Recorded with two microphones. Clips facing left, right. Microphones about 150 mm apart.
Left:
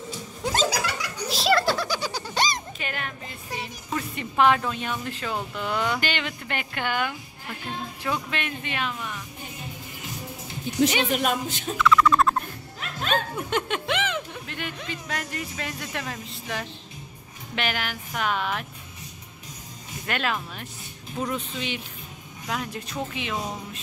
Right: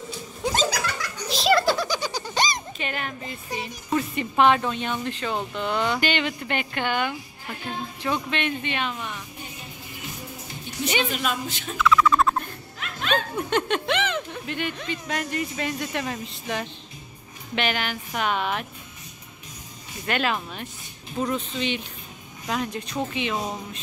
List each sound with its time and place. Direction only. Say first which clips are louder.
0.4 s music: right 1 dB; centre (ahead or behind)
0.8 s music: even; 10° left (ahead or behind)
5.0 s speech: right 2 dB; 5° left (ahead or behind)
11.1 s a woman's voice: left 3 dB; 55° left (ahead or behind)
11.7 s a sound: even; centre (ahead or behind)
13.5 s speech: right 3 dB; 5° left (ahead or behind)
20.1 s speech: right 3 dB; centre (ahead or behind)